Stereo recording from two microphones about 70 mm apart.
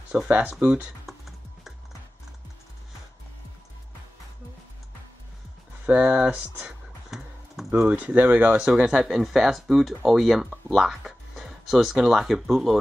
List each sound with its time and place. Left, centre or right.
0.1 s speech: right
1.0 s typing: centre
5.9 s speech: right
7.1 s computer keyboard: centre
7.8 s speech: right
8.6 s speech: centre